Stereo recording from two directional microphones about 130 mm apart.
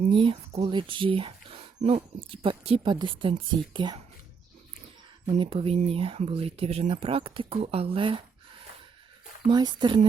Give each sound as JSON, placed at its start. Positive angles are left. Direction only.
{"t": 0.1, "sound": "speech", "side_deg": -40}
{"t": 1.8, "sound": "a woman's voice", "side_deg": -55}
{"t": 5.4, "sound": "speech", "side_deg": -45}
{"t": 9.5, "sound": "a woman's voice", "side_deg": -35}